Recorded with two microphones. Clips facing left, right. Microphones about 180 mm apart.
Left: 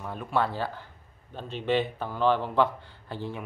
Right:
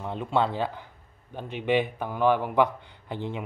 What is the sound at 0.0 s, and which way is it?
A man's voice, 20° right (ahead or behind).